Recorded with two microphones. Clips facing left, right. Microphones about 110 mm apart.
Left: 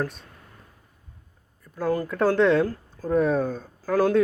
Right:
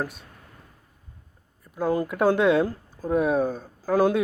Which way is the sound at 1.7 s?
15° right (ahead or behind).